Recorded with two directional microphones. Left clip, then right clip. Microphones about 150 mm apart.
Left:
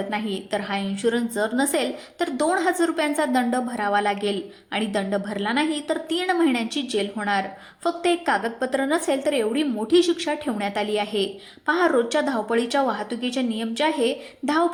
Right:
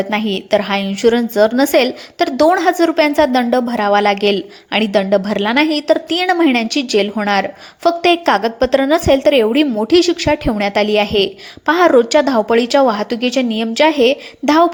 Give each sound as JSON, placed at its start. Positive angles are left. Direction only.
{"t": 0.1, "sound": "a woman's voice", "side_deg": -40}